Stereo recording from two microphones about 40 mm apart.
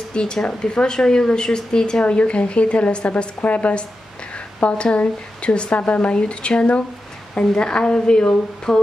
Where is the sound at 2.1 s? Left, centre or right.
Left.